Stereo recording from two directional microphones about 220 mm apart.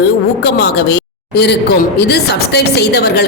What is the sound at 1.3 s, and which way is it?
A woman's voice, 50° left (ahead or behind).